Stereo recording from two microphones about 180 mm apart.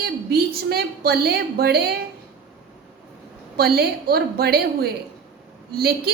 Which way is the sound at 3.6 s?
60° right (ahead or behind).